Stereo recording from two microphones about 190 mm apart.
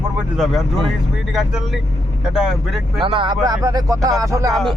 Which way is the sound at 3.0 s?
25° right (ahead or behind).